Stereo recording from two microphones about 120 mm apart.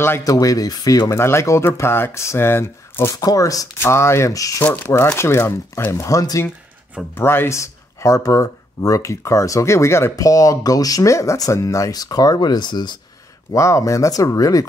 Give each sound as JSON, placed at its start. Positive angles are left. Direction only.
{"t": 0.0, "sound": "speech", "side_deg": 25}
{"t": 3.2, "sound": "speech", "side_deg": 30}
{"t": 4.6, "sound": "speech", "side_deg": 15}
{"t": 13.5, "sound": "speech", "side_deg": 25}